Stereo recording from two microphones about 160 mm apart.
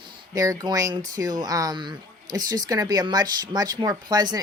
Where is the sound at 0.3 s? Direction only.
20° right (ahead or behind).